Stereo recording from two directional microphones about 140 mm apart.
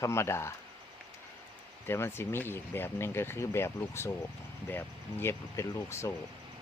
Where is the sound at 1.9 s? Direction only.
15° left (ahead or behind).